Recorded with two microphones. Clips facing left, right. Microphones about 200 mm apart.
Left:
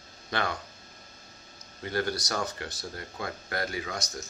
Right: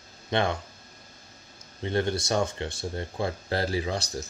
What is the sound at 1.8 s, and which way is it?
Speech, 25° right (ahead or behind).